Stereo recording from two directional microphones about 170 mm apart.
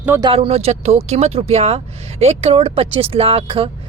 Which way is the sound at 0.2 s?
30° right (ahead or behind).